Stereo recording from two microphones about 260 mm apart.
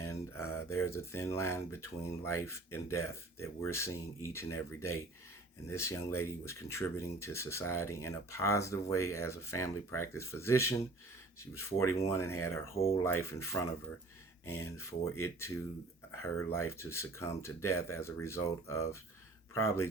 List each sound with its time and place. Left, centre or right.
0.1 s speech: centre
14.4 s speech: left
15.2 s speech: centre